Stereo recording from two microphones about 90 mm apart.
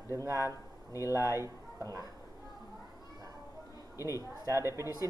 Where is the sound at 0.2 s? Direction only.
35° right (ahead or behind).